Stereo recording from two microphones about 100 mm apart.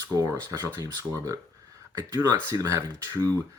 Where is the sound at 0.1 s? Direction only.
40° right (ahead or behind).